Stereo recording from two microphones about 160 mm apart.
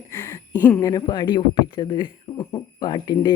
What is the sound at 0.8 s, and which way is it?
Speech, 25° left (ahead or behind).